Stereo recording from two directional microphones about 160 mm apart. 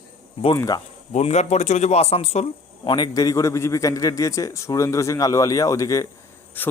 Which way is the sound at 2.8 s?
25° left (ahead or behind).